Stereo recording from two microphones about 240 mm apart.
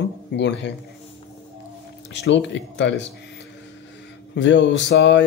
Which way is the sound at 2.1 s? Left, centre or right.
Left.